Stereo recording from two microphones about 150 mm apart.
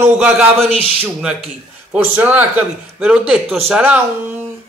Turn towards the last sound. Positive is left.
turn(degrees=-5)  # may be behind; listen again after turning